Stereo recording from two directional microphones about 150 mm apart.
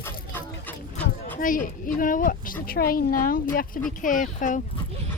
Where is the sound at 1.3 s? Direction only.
65° left (ahead or behind).